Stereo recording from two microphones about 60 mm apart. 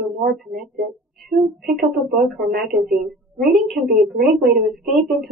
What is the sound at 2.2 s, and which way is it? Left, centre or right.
Speech, centre.